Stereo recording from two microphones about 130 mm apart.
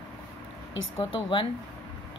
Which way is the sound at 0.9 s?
40° left (ahead or behind).